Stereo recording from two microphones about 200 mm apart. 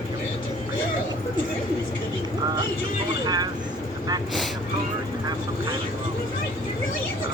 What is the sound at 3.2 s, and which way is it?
Vehicle, 20° right (ahead or behind).